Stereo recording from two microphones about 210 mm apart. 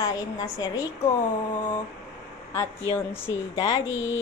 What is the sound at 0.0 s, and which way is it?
Speech, 20° left (ahead or behind).